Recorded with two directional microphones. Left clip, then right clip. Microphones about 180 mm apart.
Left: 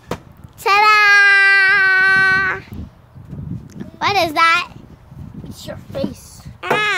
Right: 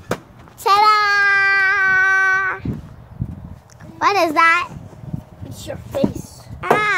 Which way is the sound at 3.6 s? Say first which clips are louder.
Right 2 dB; 10° left (ahead or behind).